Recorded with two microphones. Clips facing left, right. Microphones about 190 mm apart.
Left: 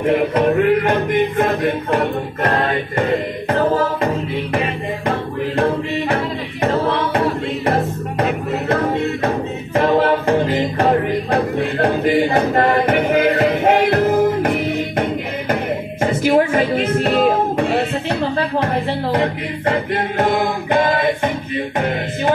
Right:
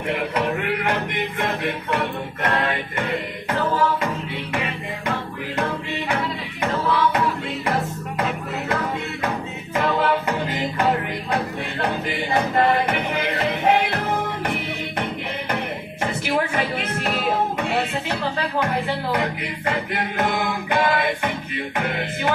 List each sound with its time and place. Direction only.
0.0 s music: 35° left (ahead or behind)
6.6 s music: 40° left (ahead or behind)
9.8 s choir: 40° left (ahead or behind)
10.8 s music: 40° left (ahead or behind)